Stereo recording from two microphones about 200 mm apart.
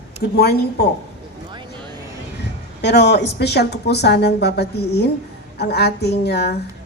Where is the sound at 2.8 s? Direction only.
60° left (ahead or behind).